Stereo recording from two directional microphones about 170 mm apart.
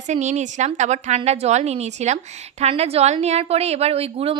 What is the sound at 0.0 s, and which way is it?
A woman's voice, 45° right (ahead or behind).